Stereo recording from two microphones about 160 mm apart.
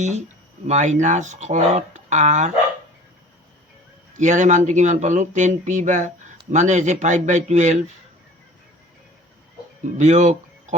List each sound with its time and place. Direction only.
0.0 s speech: 45° right (ahead or behind)
4.1 s speech: 50° right (ahead or behind)
10.0 s speech: 50° right (ahead or behind)